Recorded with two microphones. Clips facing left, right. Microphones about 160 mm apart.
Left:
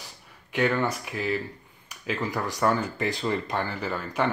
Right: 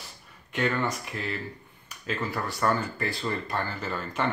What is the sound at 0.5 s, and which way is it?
Speech, 10° left (ahead or behind).